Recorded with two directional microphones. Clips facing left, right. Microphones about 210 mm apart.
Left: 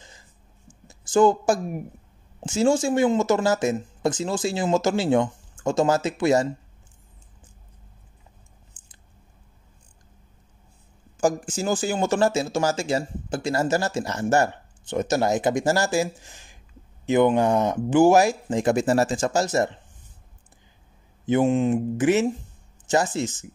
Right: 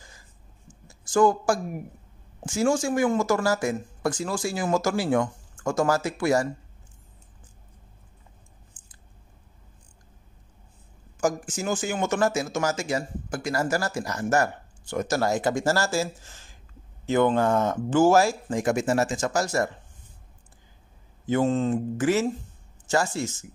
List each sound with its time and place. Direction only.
0.8 s speech: 20° left (ahead or behind)
11.1 s speech: 30° left (ahead or behind)
21.3 s speech: 15° left (ahead or behind)